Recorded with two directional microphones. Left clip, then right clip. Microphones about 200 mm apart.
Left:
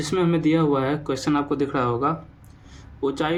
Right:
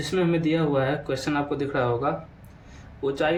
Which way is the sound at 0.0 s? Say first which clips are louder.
Left 2 dB; 45° left (ahead or behind).